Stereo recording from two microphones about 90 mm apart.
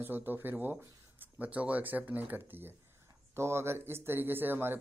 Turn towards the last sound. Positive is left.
turn(degrees=-20)  # may be behind; listen again after turning